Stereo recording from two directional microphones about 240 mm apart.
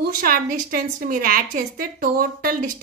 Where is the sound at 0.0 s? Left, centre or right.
Right.